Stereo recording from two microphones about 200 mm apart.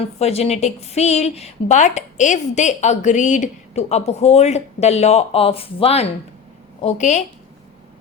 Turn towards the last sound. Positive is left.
turn(degrees=35)  # may be behind; listen again after turning